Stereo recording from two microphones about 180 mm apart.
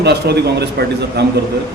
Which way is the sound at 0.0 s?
65° right (ahead or behind).